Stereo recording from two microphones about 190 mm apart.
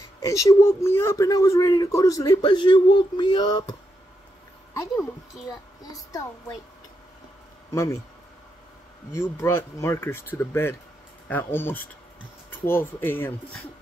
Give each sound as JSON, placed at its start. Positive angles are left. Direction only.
{"t": 0.2, "sound": "speech", "side_deg": 15}
{"t": 5.8, "sound": "speech", "side_deg": 20}
{"t": 7.7, "sound": "speech", "side_deg": 15}
{"t": 9.1, "sound": "speech", "side_deg": 15}